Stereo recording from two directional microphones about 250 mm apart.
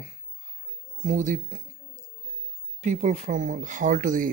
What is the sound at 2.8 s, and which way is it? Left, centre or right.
Speech, right.